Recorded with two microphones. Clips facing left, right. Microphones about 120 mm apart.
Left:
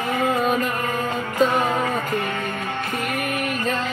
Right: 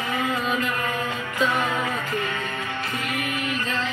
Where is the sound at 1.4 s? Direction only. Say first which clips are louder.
Left 4 dB; 40° left (ahead or behind).